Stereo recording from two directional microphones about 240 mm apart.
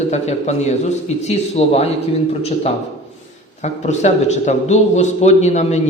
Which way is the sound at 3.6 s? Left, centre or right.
Left.